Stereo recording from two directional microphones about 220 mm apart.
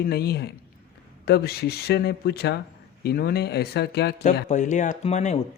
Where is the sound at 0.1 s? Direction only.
45° left (ahead or behind).